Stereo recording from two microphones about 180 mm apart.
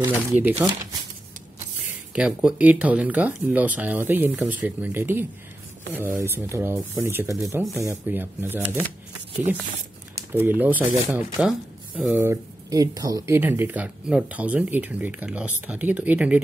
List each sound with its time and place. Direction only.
0.0 s speech: 10° right (ahead or behind)
2.1 s speech: 5° right (ahead or behind)
10.3 s speech: 10° right (ahead or behind)